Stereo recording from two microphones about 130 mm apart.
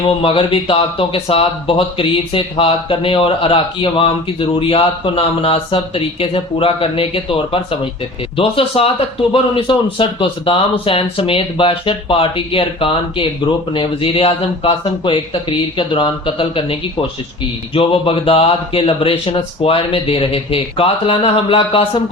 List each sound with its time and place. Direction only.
0.0 s speech: 40° left (ahead or behind)